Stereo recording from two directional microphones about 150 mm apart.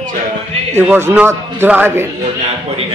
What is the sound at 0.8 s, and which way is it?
Speech, 15° right (ahead or behind).